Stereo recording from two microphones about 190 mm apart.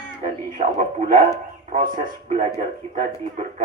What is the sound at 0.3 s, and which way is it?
A man's voice, 40° right (ahead or behind).